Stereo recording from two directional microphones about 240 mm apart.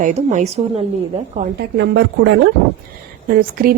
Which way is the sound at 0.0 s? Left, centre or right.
Right.